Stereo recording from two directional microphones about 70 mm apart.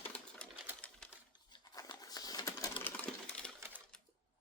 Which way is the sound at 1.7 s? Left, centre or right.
Left.